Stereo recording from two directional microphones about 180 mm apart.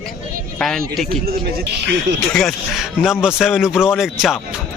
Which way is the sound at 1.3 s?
60° right (ahead or behind).